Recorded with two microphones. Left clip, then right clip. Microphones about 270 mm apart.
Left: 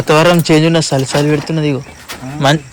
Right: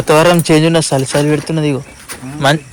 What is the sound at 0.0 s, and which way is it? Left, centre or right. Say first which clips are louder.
Speech: even; centre.